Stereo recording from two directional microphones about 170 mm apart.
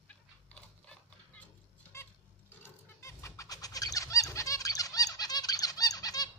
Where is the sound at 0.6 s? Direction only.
5° left (ahead or behind).